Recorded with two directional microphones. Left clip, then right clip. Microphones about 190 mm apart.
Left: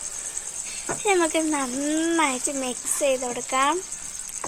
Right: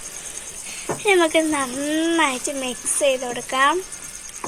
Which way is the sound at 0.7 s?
50° left (ahead or behind).